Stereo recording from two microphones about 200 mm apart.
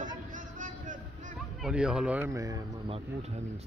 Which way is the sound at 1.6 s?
5° right (ahead or behind).